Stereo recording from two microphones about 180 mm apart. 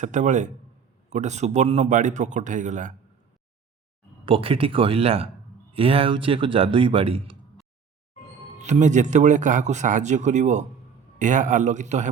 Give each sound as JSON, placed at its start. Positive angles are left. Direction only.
{"t": 0.0, "sound": "a man's voice", "side_deg": -40}
{"t": 4.3, "sound": "a man's voice", "side_deg": -30}
{"t": 8.5, "sound": "a man's voice", "side_deg": -40}